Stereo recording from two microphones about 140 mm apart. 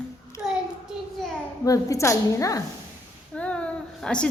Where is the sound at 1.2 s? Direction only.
Centre (ahead or behind).